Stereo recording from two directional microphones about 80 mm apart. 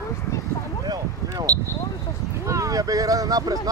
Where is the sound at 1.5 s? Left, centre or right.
Right.